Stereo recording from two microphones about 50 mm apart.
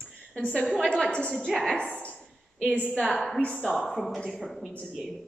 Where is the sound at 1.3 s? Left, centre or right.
Centre.